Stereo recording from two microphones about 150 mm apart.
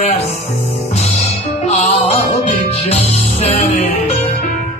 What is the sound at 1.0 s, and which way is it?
Music, 45° left (ahead or behind).